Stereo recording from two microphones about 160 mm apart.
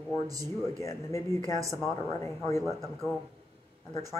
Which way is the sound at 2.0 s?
20° left (ahead or behind).